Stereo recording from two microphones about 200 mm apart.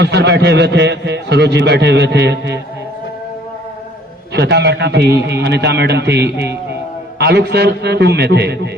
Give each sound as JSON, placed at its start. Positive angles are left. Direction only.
{"t": 0.0, "sound": "a man's voice", "side_deg": -55}
{"t": 4.4, "sound": "a man's voice", "side_deg": -60}